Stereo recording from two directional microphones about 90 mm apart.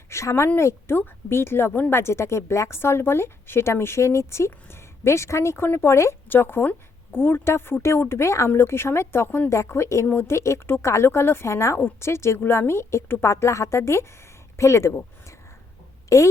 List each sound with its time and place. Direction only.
0.1 s speech: 30° left (ahead or behind)